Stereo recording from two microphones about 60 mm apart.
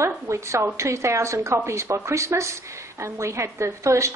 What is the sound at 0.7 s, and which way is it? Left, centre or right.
A woman's voice, right.